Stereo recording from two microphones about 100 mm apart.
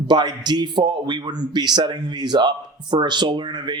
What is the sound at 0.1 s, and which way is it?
A man's voice, 45° right (ahead or behind).